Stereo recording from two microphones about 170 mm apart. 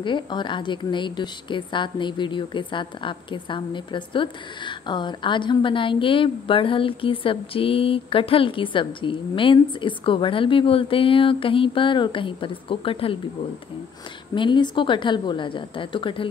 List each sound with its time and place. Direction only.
0.0 s a woman's voice: 30° left (ahead or behind)
14.3 s a woman's voice: 30° left (ahead or behind)